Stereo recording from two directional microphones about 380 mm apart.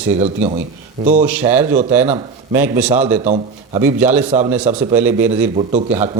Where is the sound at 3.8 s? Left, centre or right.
Centre.